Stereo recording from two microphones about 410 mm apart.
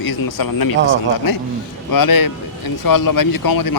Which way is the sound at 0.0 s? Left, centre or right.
Left.